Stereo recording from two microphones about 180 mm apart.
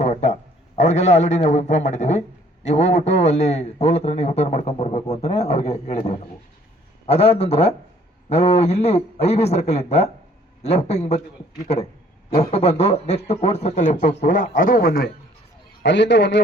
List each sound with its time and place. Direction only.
0.0 s a sound: 35° left (ahead or behind)
0.8 s a man's voice: 40° left (ahead or behind); by 15.1 s 55° left (ahead or behind)
15.8 s a man's voice: 75° left (ahead or behind)